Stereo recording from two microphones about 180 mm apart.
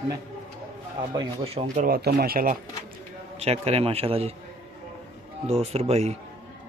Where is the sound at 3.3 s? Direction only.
35° right (ahead or behind).